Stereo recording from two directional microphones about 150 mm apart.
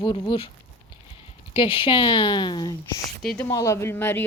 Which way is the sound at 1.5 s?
35° left (ahead or behind).